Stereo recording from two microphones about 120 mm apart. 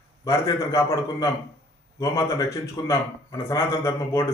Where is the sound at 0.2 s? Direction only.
25° left (ahead or behind).